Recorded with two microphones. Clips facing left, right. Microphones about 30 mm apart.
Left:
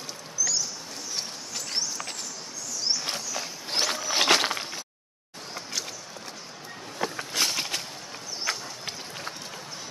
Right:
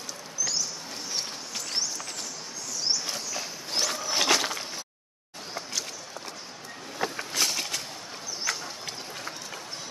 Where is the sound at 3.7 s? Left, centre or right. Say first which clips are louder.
Left 2 dB; left.